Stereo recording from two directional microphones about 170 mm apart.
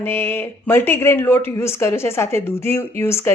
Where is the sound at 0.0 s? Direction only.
15° left (ahead or behind).